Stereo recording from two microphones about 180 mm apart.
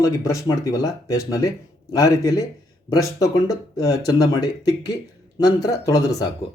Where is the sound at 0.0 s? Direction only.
20° left (ahead or behind).